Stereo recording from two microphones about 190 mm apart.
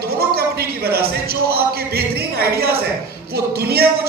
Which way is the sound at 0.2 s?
55° right (ahead or behind).